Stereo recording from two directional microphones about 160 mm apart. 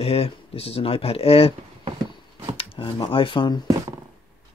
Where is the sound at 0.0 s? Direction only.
35° left (ahead or behind).